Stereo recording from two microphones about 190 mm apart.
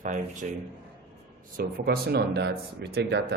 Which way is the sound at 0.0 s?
40° right (ahead or behind).